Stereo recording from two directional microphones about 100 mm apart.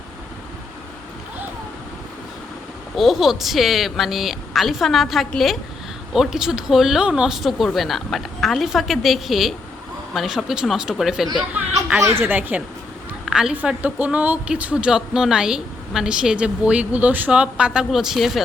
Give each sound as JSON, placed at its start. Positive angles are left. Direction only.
{"t": 2.9, "sound": "speech", "side_deg": 0}
{"t": 12.0, "sound": "speech", "side_deg": -25}
{"t": 13.2, "sound": "a woman's voice", "side_deg": -5}